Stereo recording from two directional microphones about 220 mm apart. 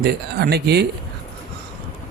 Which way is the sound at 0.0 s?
45° right (ahead or behind).